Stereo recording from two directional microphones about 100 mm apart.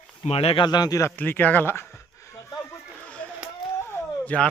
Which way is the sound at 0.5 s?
45° left (ahead or behind).